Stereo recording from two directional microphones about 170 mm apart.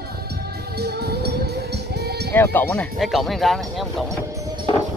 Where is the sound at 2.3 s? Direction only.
10° left (ahead or behind).